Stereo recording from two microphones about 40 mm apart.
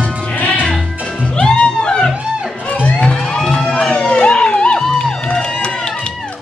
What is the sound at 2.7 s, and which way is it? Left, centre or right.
Music, left.